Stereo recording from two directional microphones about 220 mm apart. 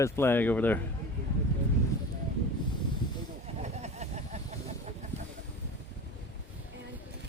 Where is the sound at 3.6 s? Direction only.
30° right (ahead or behind).